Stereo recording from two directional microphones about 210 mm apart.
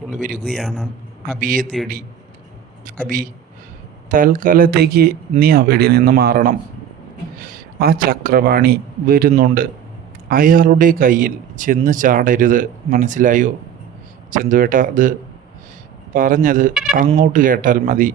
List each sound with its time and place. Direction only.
0.1 s speech: 40° right (ahead or behind)
0.4 s a man's voice: centre (ahead or behind)
1.4 s speech: 40° right (ahead or behind)
2.8 s speech: 40° right (ahead or behind)
16.1 s speech: 40° right (ahead or behind)